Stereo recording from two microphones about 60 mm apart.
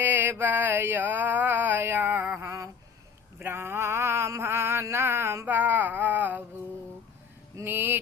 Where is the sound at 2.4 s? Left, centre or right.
Right.